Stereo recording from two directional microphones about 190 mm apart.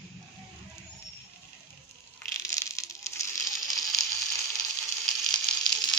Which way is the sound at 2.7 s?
15° left (ahead or behind).